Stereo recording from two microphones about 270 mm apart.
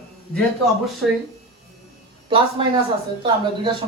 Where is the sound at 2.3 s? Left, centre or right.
Centre.